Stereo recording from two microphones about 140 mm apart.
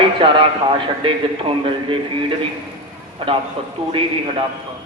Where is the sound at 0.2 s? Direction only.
40° right (ahead or behind).